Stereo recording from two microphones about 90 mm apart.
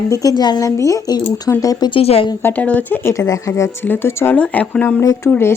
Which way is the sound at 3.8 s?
25° left (ahead or behind).